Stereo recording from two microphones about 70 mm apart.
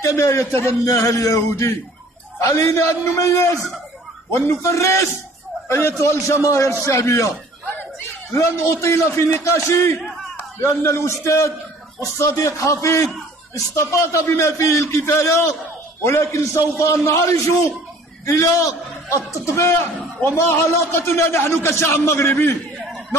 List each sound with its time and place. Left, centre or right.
0.0 s a man's voice: left
4.5 s a man's voice: left
8.4 s a man's voice: left